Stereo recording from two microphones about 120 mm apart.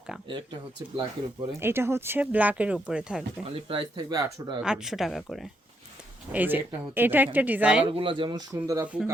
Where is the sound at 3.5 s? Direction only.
45° right (ahead or behind).